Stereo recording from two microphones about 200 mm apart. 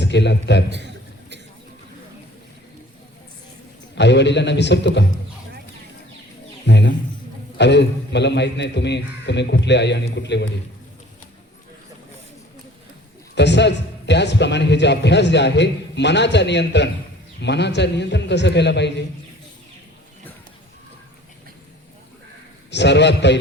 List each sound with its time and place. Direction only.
0.0 s a man's voice: 60° left (ahead or behind)
0.7 s a sound: 60° right (ahead or behind)
3.9 s a man's voice: 60° left (ahead or behind)
6.7 s a man's voice: 60° left (ahead or behind)
13.3 s a man's voice: 60° left (ahead or behind)
22.7 s a man's voice: 60° left (ahead or behind)